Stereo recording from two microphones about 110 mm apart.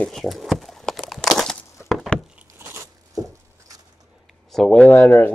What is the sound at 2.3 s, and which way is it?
Biting, 20° right (ahead or behind).